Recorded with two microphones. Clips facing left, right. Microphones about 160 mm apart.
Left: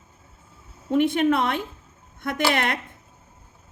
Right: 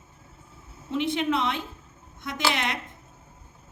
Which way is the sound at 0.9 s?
50° left (ahead or behind).